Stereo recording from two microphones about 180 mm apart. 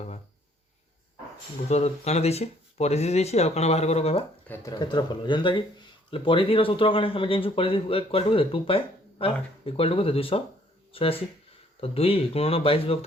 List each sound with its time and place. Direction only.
1.7 s speech: 35° left (ahead or behind)
4.7 s speech: 25° left (ahead or behind)